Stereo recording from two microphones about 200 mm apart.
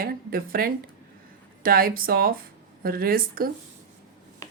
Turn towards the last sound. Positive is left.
turn(degrees=-45)  # may be behind; listen again after turning